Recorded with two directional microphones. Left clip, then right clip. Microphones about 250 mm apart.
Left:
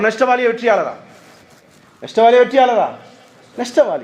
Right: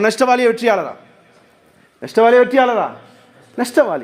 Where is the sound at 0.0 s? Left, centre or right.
Right.